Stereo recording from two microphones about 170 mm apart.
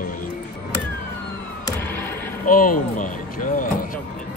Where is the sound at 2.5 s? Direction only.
55° left (ahead or behind).